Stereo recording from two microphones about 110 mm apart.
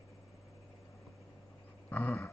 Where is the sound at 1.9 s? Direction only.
15° left (ahead or behind).